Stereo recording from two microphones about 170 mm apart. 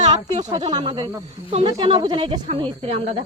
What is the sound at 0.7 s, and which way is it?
Speech, 25° right (ahead or behind).